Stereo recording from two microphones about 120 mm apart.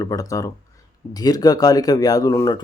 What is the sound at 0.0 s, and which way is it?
Speech, 30° left (ahead or behind).